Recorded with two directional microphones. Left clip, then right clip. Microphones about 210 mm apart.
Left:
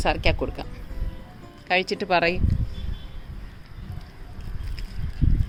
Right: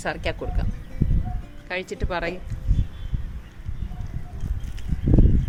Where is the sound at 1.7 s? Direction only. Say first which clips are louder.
Left 7 dB; 45° left (ahead or behind).